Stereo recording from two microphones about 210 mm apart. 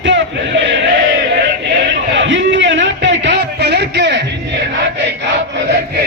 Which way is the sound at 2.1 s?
60° right (ahead or behind).